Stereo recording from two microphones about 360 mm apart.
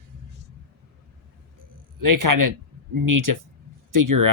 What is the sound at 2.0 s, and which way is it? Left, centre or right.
Speech, right.